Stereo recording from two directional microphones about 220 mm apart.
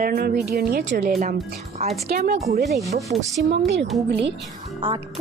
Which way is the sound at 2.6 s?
Centre (ahead or behind).